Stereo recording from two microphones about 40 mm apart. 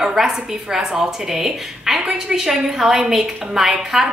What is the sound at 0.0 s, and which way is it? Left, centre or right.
A woman's voice, centre.